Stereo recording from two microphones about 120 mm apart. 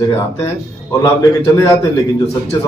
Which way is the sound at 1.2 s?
25° left (ahead or behind).